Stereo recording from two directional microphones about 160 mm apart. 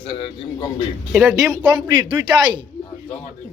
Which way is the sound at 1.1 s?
5° right (ahead or behind).